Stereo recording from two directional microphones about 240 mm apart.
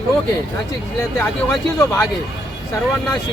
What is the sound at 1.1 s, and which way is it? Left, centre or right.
Speech, centre.